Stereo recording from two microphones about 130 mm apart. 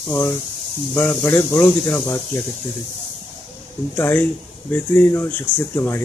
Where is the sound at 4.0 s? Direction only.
15° left (ahead or behind).